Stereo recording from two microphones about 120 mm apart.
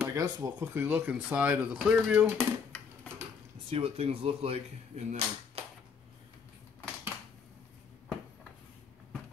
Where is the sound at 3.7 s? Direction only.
50° right (ahead or behind).